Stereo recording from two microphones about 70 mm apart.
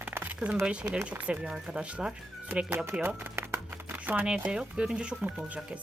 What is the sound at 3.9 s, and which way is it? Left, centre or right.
Crumpling, right.